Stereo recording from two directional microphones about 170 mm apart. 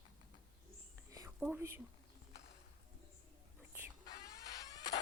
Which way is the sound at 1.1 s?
20° right (ahead or behind).